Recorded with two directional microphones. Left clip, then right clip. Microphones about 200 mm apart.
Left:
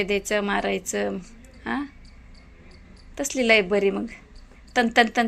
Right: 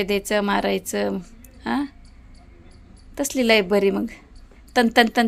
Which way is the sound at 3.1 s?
20° right (ahead or behind).